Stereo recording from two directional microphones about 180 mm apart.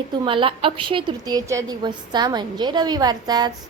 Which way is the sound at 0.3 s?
30° right (ahead or behind).